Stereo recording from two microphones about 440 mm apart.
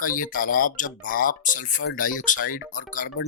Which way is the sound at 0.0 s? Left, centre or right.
Centre.